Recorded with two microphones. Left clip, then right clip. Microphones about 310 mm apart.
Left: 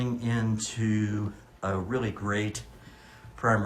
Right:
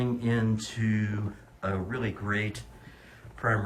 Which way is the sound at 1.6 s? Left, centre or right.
Centre.